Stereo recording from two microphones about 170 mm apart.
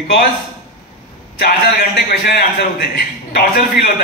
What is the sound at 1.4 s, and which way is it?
A man's voice, 75° left (ahead or behind).